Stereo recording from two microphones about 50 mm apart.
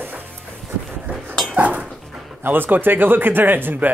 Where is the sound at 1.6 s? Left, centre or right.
Right.